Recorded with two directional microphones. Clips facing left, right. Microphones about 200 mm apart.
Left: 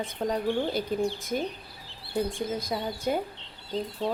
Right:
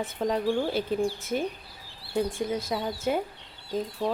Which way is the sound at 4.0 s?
20° left (ahead or behind).